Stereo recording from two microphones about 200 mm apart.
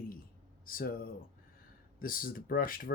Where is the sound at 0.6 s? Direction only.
45° left (ahead or behind).